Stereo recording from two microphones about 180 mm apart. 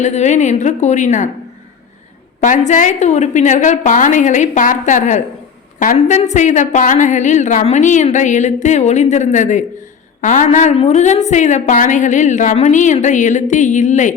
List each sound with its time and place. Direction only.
0.0 s a woman's voice: 40° left (ahead or behind)
2.4 s a woman's voice: 45° left (ahead or behind)